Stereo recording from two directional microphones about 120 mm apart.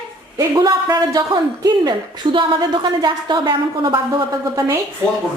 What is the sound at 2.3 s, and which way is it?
A woman's voice, 40° right (ahead or behind).